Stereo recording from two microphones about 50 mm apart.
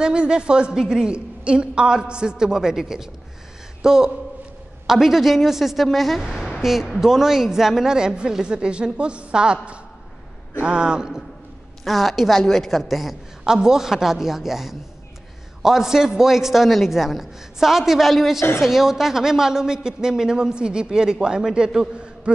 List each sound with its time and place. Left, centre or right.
0.0 s a woman's voice: centre
11.8 s a man's voice: centre; by 22.3 s right